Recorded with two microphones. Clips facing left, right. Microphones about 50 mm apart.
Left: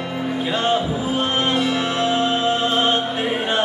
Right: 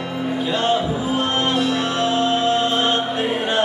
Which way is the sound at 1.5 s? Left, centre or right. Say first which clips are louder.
Even; left.